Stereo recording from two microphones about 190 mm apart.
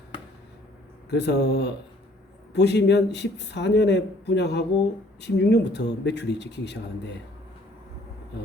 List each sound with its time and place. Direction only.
1.1 s speech: 65° left (ahead or behind)